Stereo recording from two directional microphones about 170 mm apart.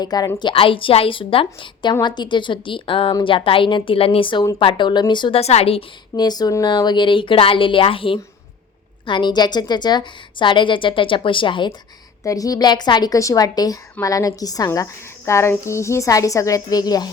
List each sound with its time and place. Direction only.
0.0 s a woman's voice: 25° left (ahead or behind)